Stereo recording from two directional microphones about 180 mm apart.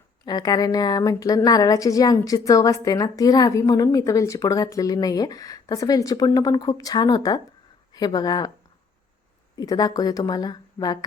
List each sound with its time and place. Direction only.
0.3 s a woman's voice: 20° left (ahead or behind)
9.6 s a woman's voice: 20° left (ahead or behind)